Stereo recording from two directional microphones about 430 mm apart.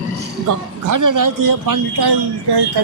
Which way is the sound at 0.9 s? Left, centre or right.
Right.